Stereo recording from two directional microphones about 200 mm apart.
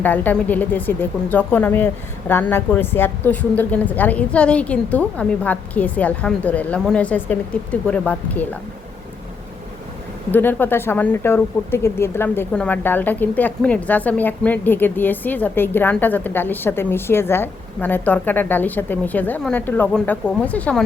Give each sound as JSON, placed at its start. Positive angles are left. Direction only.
{"t": 0.0, "sound": "speech", "side_deg": 10}
{"t": 10.3, "sound": "speech", "side_deg": 10}